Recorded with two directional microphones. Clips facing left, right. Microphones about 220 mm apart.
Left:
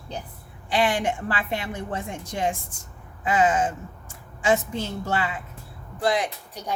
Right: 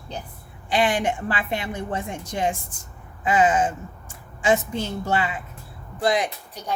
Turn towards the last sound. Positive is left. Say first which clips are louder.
# right 2 dB
turn(degrees=-15)  # may be behind; listen again after turning